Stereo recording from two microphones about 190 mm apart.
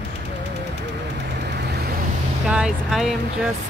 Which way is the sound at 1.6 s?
55° right (ahead or behind).